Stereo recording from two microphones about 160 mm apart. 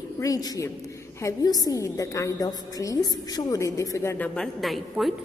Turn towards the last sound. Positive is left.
turn(degrees=0)  # may be behind; listen again after turning